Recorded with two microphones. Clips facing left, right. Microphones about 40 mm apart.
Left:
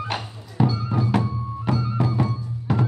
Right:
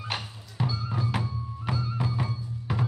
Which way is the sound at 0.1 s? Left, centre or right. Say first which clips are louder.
Left 5 dB; centre.